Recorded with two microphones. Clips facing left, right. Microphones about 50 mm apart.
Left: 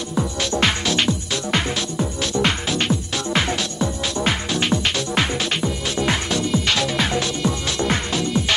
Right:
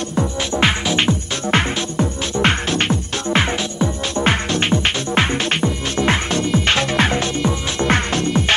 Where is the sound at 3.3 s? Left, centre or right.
Right.